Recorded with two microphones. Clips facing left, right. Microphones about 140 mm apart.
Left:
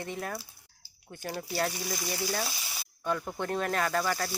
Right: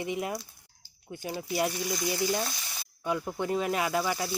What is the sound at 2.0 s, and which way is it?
Speech, 15° right (ahead or behind).